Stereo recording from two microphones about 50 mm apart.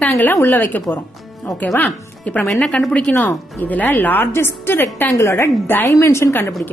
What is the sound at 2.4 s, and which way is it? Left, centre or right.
Speech, centre.